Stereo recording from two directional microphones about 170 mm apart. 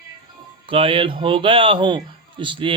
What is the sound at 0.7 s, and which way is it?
Speech, 30° right (ahead or behind).